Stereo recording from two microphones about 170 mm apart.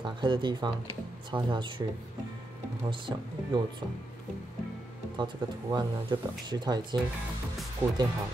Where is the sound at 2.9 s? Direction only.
25° right (ahead or behind).